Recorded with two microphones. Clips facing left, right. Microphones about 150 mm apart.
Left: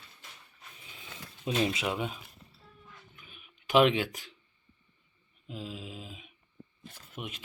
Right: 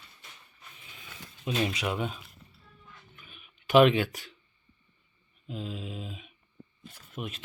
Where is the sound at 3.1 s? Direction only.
15° left (ahead or behind).